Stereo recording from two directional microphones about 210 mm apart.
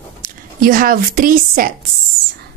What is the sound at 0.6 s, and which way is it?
Speech, 45° right (ahead or behind).